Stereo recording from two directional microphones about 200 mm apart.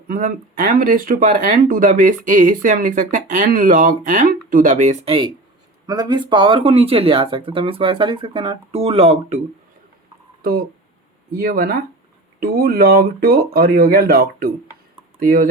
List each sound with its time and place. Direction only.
0.1 s speech: 45° right (ahead or behind)
11.3 s speech: 45° right (ahead or behind)